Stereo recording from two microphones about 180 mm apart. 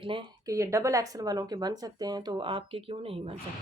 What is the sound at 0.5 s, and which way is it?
Speech, 15° right (ahead or behind).